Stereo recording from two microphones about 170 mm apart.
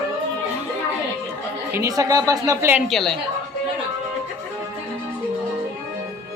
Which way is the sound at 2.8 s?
Centre (ahead or behind).